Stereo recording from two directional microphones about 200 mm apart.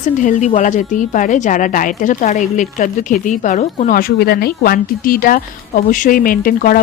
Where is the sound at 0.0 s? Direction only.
40° left (ahead or behind).